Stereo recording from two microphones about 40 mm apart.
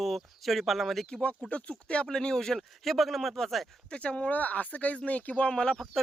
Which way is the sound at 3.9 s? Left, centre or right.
Left.